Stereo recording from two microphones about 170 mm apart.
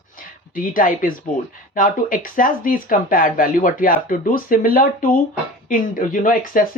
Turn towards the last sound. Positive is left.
turn(degrees=55)  # may be behind; listen again after turning